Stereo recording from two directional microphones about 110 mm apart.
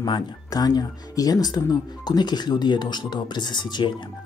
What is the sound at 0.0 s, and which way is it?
Speech, 40° left (ahead or behind).